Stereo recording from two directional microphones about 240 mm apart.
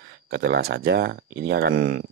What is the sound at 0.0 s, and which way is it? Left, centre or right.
Speech, right.